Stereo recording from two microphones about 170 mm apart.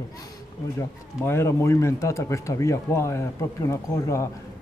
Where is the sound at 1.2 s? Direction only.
15° left (ahead or behind).